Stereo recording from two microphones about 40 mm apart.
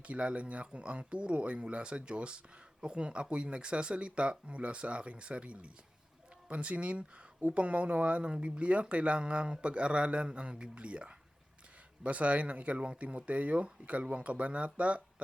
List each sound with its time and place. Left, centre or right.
0.0 s speech: right